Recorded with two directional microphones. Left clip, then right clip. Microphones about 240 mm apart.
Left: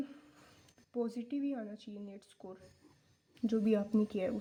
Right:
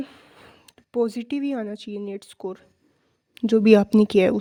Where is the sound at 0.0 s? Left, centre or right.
Right.